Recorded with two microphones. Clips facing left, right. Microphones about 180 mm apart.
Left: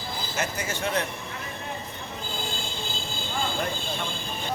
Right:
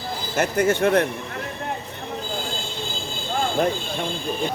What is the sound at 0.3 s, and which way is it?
Speech, 55° right (ahead or behind).